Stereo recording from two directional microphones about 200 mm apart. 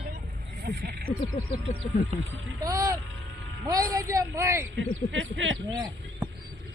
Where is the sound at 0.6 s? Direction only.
50° right (ahead or behind).